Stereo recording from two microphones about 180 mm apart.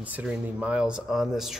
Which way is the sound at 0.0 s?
10° right (ahead or behind).